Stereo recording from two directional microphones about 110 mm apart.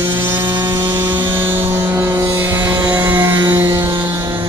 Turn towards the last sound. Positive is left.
turn(degrees=-45)  # may be behind; listen again after turning